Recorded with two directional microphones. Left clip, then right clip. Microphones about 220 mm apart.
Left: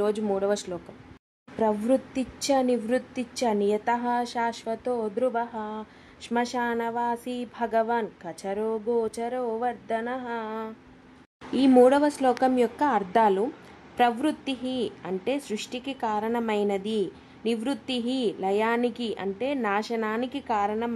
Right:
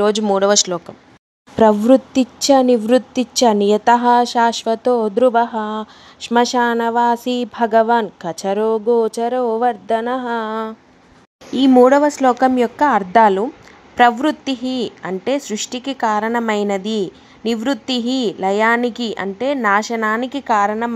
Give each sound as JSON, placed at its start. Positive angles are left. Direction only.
{"t": 0.0, "sound": "a woman's voice", "side_deg": -20}